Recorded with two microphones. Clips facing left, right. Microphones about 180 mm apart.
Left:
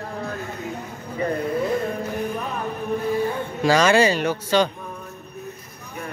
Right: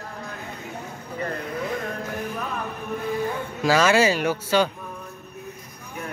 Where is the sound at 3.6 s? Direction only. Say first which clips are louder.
Left 2 dB; 5° right (ahead or behind).